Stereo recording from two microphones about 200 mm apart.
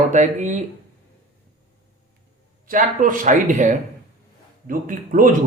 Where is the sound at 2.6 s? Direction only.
40° right (ahead or behind).